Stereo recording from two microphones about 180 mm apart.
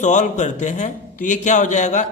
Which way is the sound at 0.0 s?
40° left (ahead or behind).